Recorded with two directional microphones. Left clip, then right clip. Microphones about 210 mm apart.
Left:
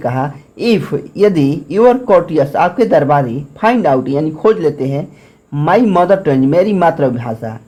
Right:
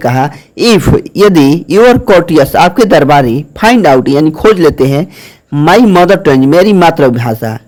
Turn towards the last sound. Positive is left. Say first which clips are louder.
# right 7 dB
turn(degrees=-40)  # may be behind; listen again after turning